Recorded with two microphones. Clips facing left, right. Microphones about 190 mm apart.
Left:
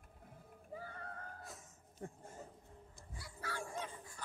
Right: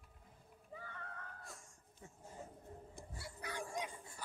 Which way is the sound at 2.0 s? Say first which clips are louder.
Left 10 dB; 55° left (ahead or behind).